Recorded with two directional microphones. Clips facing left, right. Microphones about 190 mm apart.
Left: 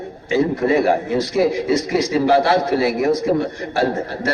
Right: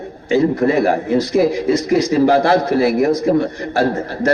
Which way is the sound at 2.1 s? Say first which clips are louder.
Right 2 dB; 45° right (ahead or behind).